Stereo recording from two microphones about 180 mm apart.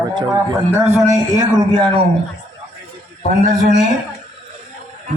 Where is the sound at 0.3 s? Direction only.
15° right (ahead or behind).